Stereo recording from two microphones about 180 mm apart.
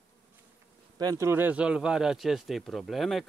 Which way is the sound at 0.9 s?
20° right (ahead or behind).